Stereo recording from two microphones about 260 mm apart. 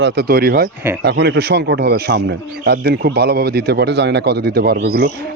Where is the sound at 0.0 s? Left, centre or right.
Right.